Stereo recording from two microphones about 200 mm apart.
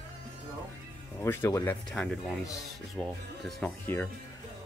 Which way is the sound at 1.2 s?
10° left (ahead or behind).